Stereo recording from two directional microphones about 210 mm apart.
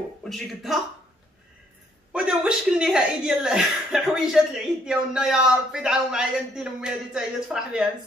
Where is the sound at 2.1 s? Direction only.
5° right (ahead or behind).